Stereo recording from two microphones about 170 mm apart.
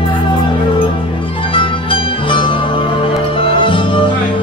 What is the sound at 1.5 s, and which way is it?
Music, 30° left (ahead or behind).